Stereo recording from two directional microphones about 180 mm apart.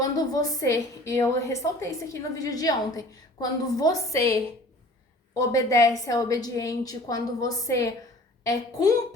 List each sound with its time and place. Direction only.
0.3 s a woman's voice: 20° left (ahead or behind)